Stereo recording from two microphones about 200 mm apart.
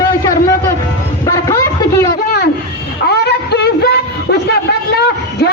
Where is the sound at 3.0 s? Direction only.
55° left (ahead or behind).